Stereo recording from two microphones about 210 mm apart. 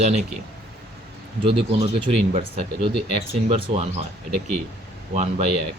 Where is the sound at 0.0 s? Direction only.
30° right (ahead or behind).